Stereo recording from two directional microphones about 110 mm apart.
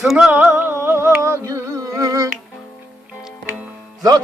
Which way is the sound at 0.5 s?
25° right (ahead or behind).